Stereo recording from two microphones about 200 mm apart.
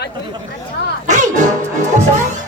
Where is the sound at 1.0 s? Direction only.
35° right (ahead or behind).